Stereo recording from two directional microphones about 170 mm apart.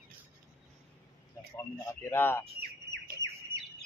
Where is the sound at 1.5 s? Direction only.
15° left (ahead or behind).